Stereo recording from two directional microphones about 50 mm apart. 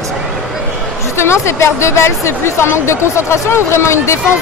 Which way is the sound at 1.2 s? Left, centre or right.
Left.